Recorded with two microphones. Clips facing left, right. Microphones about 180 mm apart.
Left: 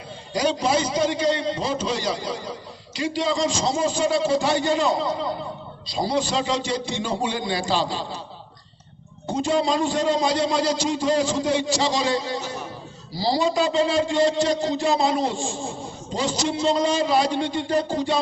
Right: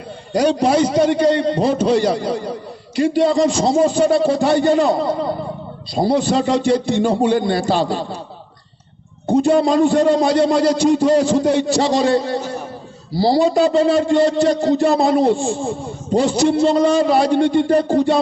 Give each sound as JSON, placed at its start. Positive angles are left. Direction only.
{"t": 0.3, "sound": "a man's voice", "side_deg": -60}
{"t": 9.2, "sound": "a man's voice", "side_deg": -60}